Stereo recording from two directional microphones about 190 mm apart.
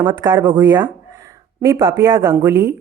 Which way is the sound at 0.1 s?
20° right (ahead or behind).